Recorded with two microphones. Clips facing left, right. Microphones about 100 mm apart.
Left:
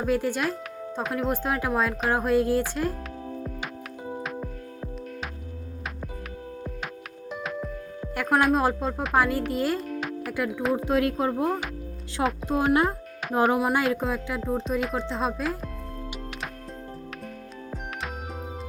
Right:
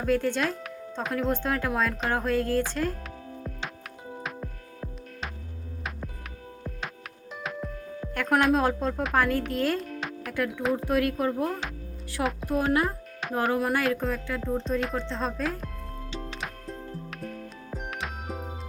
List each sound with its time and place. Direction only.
0.0 s speech: 10° left (ahead or behind)
4.2 s music: 5° left (ahead or behind)
8.0 s a woman's voice: 5° left (ahead or behind)
10.8 s speech: 20° left (ahead or behind)
13.5 s speech: 15° left (ahead or behind)
17.2 s music: centre (ahead or behind)